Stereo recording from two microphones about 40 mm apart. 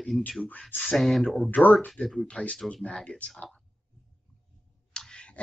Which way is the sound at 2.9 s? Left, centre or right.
Left.